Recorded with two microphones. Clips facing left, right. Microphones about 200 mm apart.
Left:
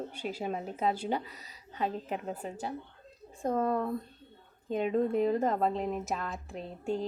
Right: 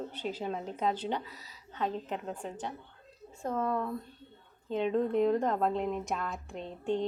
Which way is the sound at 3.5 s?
35° left (ahead or behind).